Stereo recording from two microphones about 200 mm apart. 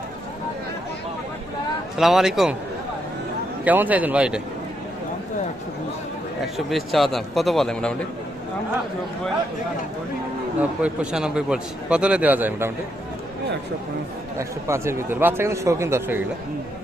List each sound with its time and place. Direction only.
2.0 s a man's voice: centre (ahead or behind)
3.6 s speech: 10° right (ahead or behind)
6.4 s a man's voice: centre (ahead or behind)
10.6 s a man's voice: 5° right (ahead or behind)
14.3 s speech: 15° right (ahead or behind)